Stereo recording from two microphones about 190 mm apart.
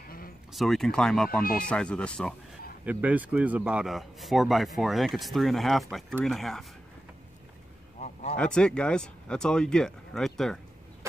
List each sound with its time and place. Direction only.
0.5 s a man's voice: centre (ahead or behind)
2.8 s a man's voice: 10° right (ahead or behind)
8.0 s a sound: 35° left (ahead or behind)
8.4 s a man's voice: 5° left (ahead or behind)